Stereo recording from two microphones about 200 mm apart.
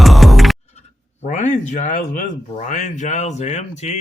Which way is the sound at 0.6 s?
35° left (ahead or behind).